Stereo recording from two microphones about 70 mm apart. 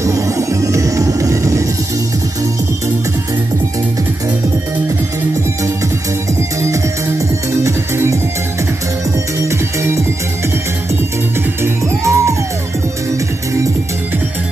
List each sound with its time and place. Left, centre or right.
0.0 s music: right
6.6 s music: right
9.5 s music: right
11.6 s music: right